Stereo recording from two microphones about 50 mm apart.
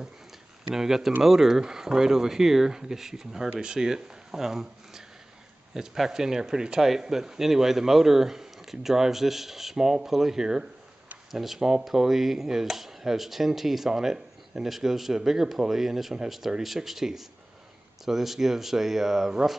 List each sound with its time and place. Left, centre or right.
0.7 s speech: centre